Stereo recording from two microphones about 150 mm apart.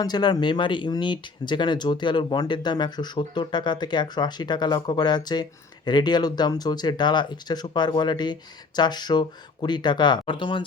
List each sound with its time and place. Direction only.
0.0 s speech: 30° left (ahead or behind)